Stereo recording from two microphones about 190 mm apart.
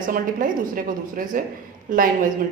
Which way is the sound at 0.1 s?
45° right (ahead or behind).